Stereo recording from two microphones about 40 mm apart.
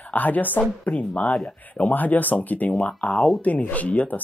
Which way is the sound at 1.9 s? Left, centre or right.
Left.